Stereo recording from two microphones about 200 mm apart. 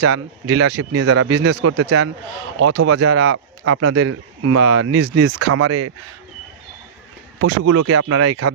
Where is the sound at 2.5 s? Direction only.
75° right (ahead or behind).